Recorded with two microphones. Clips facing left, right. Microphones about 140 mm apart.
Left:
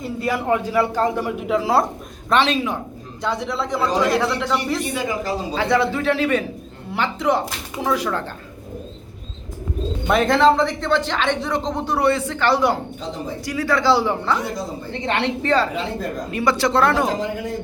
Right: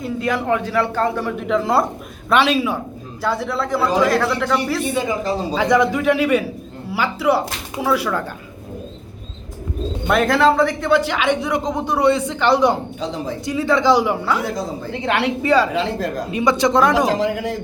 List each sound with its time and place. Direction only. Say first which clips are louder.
0.0 s a sound: right 2 dB; 5° left (ahead or behind)
0.4 s speech: left 2 dB; 15° left (ahead or behind)
2.3 s a man's voice: right 2 dB; 10° right (ahead or behind)
4.9 s speech: right 3 dB; 25° right (ahead or behind)
5.6 s speech: right 3 dB; 15° right (ahead or behind)
10.1 s speech: even; centre (ahead or behind)
15.7 s speech: right 4 dB; 90° right
16.3 s speech: right 2 dB; 20° right (ahead or behind)
17.1 s speech: right 4 dB; 90° right